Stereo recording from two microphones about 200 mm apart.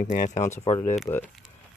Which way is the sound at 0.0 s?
40° left (ahead or behind).